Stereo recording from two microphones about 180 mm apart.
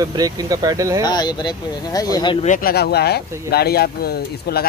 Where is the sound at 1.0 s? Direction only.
25° left (ahead or behind).